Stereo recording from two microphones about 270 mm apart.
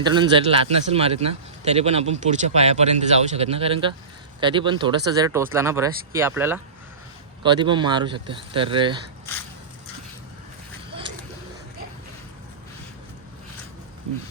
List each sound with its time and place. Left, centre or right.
0.0 s speech: centre